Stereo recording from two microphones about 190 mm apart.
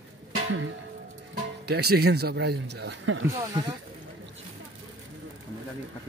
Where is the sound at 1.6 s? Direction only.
60° right (ahead or behind).